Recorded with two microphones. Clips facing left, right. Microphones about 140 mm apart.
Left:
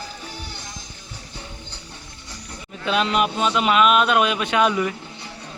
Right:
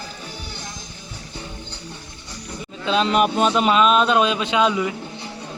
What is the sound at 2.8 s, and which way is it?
Speech, 30° right (ahead or behind).